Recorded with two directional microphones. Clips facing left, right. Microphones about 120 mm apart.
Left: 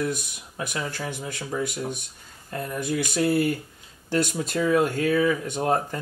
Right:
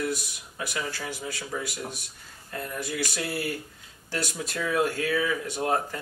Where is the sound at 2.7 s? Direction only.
20° left (ahead or behind).